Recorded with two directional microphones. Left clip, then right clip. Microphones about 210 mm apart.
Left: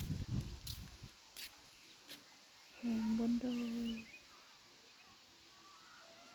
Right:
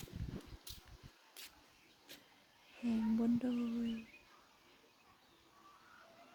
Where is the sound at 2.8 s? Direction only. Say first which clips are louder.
Right 2 dB; 20° right (ahead or behind).